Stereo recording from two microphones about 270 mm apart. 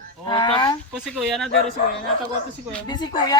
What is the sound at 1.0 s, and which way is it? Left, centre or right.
Speech, centre.